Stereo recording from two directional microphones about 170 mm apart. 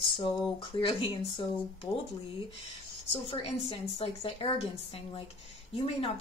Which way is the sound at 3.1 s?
35° left (ahead or behind).